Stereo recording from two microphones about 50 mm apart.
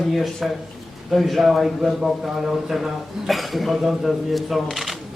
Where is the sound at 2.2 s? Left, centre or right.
Centre.